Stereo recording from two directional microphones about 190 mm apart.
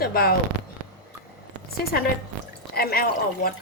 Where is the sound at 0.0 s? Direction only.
55° left (ahead or behind).